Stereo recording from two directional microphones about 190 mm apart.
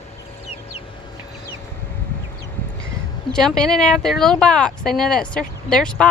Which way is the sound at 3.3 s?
5° left (ahead or behind).